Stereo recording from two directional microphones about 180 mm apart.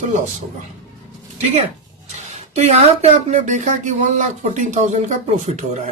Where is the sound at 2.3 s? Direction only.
35° right (ahead or behind).